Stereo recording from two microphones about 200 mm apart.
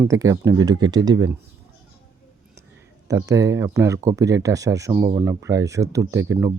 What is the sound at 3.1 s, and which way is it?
Speech, 15° right (ahead or behind).